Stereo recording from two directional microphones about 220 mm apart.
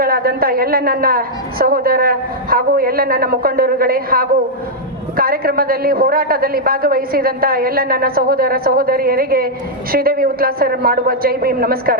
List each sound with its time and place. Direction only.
0.0 s a man's voice: 45° right (ahead or behind)